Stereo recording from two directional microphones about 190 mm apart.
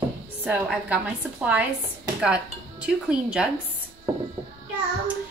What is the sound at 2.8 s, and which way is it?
Speech, 5° right (ahead or behind).